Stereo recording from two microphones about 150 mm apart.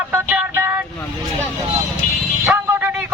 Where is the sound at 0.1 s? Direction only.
15° right (ahead or behind).